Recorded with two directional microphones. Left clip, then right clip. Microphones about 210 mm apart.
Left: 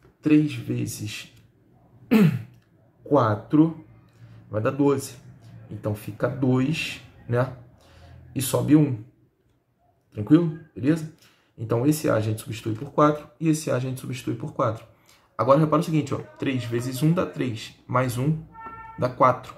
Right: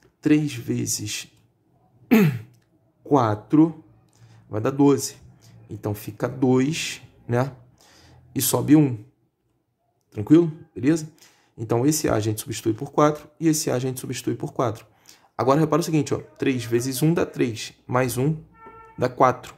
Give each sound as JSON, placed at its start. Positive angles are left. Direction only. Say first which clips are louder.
{"t": 0.2, "sound": "speech", "louder": "even", "side_deg": -50}
{"t": 2.0, "sound": "throat clearing", "louder": "right 2 dB", "side_deg": -55}
{"t": 3.1, "sound": "speech", "louder": "right 1 dB", "side_deg": -50}
{"t": 10.1, "sound": "speech", "louder": "right 3 dB", "side_deg": -50}